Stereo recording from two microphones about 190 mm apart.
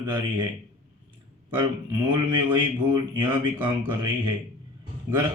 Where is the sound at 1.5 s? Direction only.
25° right (ahead or behind).